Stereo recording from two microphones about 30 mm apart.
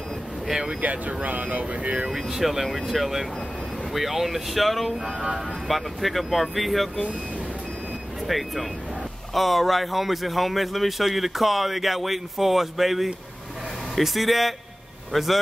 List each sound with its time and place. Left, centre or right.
0.7 s speech: right
2.0 s a man's voice: centre
8.3 s a man's voice: centre